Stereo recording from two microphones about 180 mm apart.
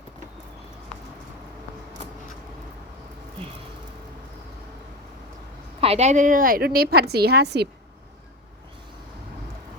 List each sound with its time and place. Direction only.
5.8 s a woman's voice: 35° right (ahead or behind); by 7.7 s 65° right (ahead or behind)